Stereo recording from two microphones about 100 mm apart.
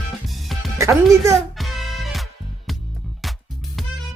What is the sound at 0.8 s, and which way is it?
Speech, 30° right (ahead or behind).